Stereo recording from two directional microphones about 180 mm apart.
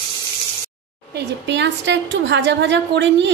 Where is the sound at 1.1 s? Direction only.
75° right (ahead or behind).